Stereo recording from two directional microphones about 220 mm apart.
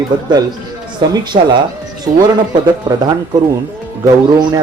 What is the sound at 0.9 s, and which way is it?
Speech, 20° right (ahead or behind).